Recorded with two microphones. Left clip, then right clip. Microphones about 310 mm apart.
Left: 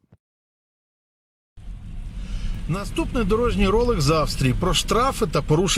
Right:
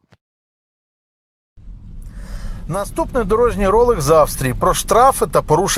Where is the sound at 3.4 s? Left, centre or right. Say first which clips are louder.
Right 9 dB; right.